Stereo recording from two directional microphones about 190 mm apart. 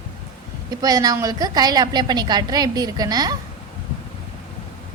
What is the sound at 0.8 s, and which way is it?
A woman's voice, 20° right (ahead or behind).